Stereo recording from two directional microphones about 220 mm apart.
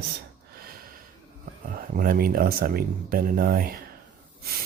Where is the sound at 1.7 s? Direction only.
40° right (ahead or behind).